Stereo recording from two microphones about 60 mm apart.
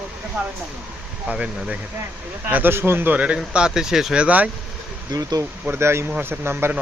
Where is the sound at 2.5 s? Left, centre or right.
Right.